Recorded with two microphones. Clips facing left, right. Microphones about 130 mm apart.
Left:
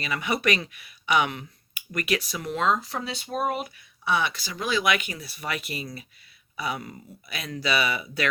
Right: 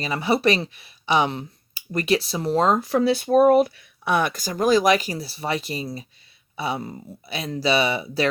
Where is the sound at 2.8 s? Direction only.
60° right (ahead or behind).